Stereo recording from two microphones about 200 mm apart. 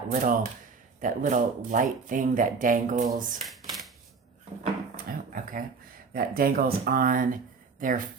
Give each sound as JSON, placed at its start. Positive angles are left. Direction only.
{"t": 0.1, "sound": "speech", "side_deg": -40}
{"t": 3.4, "sound": "shuffling cards", "side_deg": 0}
{"t": 4.6, "sound": "a sound", "side_deg": -45}
{"t": 6.1, "sound": "speech", "side_deg": -45}